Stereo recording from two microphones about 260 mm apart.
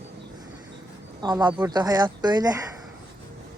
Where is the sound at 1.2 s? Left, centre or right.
Centre.